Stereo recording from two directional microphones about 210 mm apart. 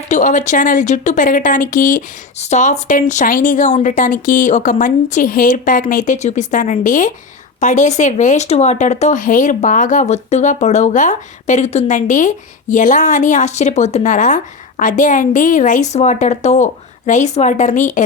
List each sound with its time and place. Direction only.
0.1 s speech: 35° left (ahead or behind)